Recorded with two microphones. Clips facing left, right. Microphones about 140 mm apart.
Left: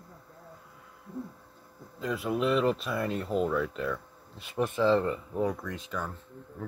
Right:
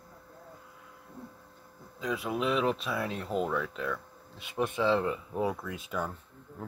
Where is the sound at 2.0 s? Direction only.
Centre (ahead or behind).